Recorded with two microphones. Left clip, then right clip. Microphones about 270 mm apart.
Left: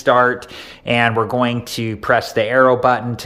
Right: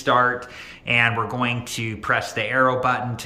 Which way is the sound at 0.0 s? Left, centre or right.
Left.